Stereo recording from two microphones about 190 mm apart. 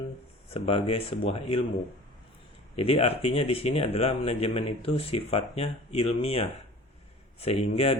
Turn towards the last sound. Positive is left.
turn(degrees=30)  # may be behind; listen again after turning